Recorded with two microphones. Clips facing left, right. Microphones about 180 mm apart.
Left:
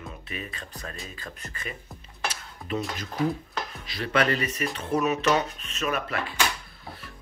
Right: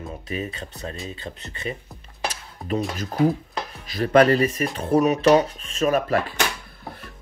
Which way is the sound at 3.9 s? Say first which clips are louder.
Right 9 dB; 40° right (ahead or behind).